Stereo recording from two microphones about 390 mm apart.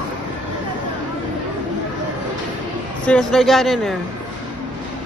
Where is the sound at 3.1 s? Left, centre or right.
Centre.